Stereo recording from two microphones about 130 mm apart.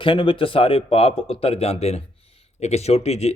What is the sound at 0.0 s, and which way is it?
A man's voice, 45° left (ahead or behind).